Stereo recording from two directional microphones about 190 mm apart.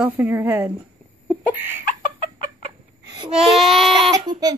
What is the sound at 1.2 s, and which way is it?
Chicken, 10° right (ahead or behind).